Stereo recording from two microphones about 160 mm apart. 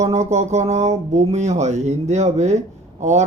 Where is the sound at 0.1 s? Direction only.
45° right (ahead or behind).